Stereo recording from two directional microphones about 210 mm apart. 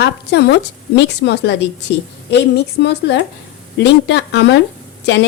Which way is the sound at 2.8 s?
55° left (ahead or behind).